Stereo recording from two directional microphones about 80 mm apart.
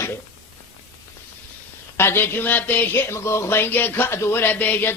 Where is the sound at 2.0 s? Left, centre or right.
Left.